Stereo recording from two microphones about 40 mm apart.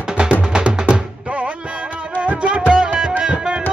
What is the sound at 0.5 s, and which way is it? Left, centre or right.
Music, right.